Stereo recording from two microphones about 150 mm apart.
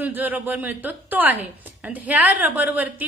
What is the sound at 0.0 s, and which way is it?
A woman's voice, 10° right (ahead or behind).